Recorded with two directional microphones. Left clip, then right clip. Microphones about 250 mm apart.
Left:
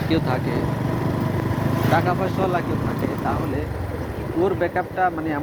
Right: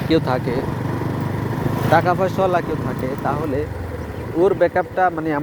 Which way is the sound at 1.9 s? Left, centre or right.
Right.